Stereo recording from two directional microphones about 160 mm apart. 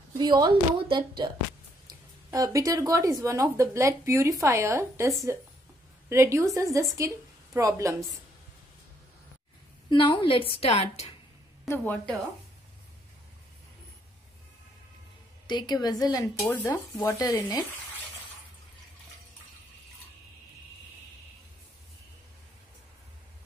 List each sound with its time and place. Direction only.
0.2 s speech: 25° right (ahead or behind)
9.8 s a woman's voice: 30° left (ahead or behind)
11.6 s a woman's voice: 10° left (ahead or behind)
15.4 s stir: 25° left (ahead or behind)